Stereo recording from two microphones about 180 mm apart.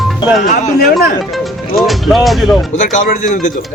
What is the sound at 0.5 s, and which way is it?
Speech, 40° left (ahead or behind).